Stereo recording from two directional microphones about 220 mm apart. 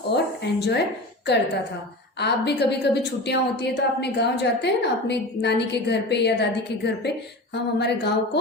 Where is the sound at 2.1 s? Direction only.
50° left (ahead or behind).